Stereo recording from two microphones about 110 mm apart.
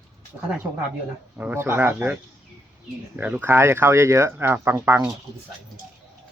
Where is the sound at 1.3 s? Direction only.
20° right (ahead or behind).